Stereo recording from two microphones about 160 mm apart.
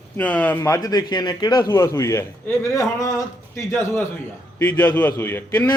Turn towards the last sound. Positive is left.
turn(degrees=15)  # may be behind; listen again after turning